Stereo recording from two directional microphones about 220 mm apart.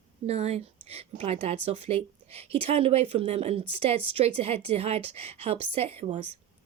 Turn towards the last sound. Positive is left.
turn(degrees=-25)  # may be behind; listen again after turning